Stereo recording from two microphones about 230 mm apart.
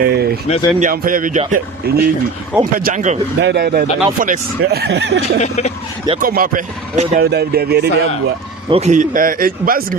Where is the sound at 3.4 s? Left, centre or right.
Right.